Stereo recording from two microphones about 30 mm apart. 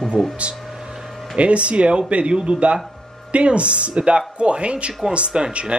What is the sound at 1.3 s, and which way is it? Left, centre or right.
Speech, right.